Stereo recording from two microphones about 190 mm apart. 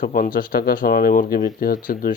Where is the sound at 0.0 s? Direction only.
45° left (ahead or behind).